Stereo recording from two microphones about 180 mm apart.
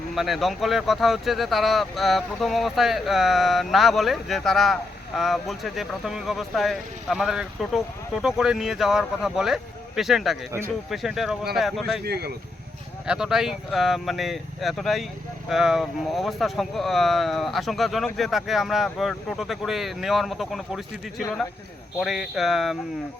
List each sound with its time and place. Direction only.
0.1 s speech: centre (ahead or behind)
12.0 s speech: 60° right (ahead or behind)
13.1 s speech: 5° right (ahead or behind)